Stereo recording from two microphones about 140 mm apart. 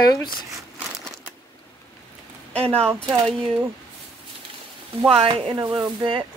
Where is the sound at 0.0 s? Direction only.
30° left (ahead or behind).